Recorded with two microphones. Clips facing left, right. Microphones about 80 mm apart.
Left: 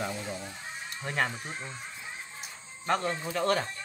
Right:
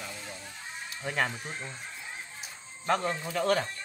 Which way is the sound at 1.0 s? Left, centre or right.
Centre.